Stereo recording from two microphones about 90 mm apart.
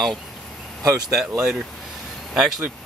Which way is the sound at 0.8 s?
40° right (ahead or behind).